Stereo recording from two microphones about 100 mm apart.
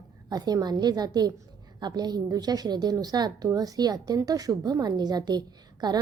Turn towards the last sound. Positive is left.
turn(degrees=-45)  # may be behind; listen again after turning